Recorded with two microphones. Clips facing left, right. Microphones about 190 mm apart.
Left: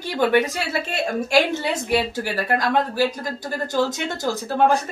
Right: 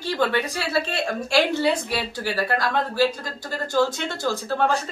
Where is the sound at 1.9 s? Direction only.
20° left (ahead or behind).